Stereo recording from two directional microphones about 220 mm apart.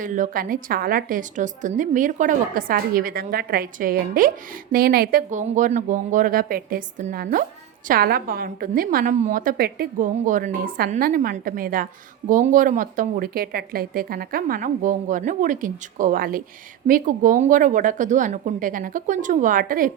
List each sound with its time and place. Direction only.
0.0 s a woman's voice: 35° right (ahead or behind)